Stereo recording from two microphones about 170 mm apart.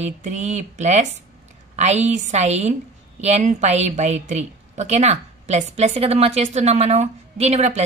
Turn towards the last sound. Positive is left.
turn(degrees=-40)  # may be behind; listen again after turning